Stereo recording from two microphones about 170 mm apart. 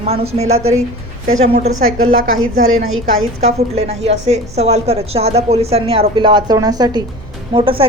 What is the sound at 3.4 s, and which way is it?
A woman's voice, 40° right (ahead or behind).